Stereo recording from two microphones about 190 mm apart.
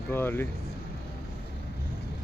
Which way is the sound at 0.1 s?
10° left (ahead or behind).